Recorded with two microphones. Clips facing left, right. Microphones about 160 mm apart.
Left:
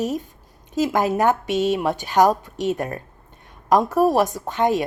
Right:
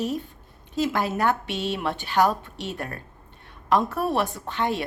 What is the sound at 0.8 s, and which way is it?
Speech, 15° left (ahead or behind).